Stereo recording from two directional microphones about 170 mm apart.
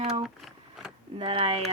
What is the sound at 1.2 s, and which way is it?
Speech, 30° right (ahead or behind).